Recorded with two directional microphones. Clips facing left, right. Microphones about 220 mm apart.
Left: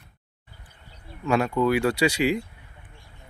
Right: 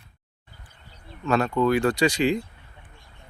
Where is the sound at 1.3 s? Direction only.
10° left (ahead or behind).